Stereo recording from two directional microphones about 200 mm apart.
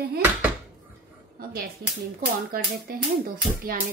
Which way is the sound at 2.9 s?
50° right (ahead or behind).